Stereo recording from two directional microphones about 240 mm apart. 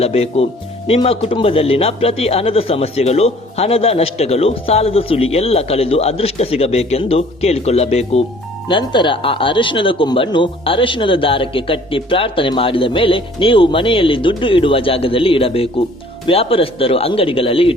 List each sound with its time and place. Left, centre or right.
0.0 s speech: left